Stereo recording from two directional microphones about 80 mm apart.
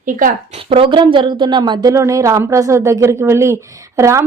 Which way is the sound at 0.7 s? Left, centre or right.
Right.